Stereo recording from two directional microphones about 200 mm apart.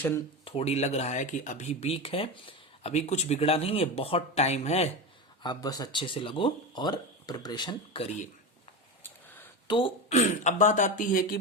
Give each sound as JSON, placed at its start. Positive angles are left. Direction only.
{"t": 0.4, "sound": "speech", "side_deg": 30}
{"t": 5.4, "sound": "speech", "side_deg": 20}
{"t": 9.0, "sound": "a sound", "side_deg": 10}
{"t": 9.6, "sound": "speech", "side_deg": 25}